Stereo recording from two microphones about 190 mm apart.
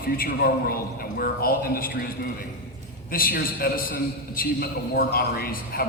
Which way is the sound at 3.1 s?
50° left (ahead or behind).